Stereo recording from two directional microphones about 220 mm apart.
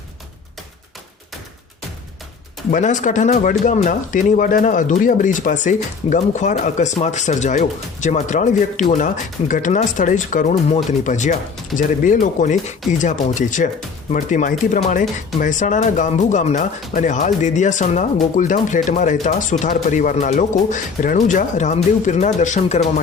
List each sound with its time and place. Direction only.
2.6 s speech: 35° left (ahead or behind)